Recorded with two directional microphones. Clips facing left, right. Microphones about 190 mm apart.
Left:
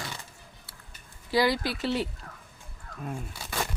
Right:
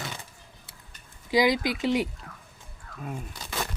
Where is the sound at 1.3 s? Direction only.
15° right (ahead or behind).